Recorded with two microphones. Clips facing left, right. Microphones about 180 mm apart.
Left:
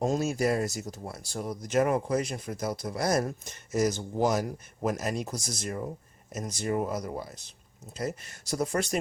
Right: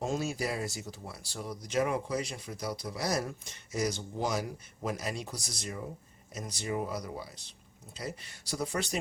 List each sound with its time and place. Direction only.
0.0 s speech: 45° left (ahead or behind)